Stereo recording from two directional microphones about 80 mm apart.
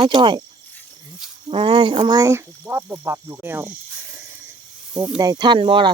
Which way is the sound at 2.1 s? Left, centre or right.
Right.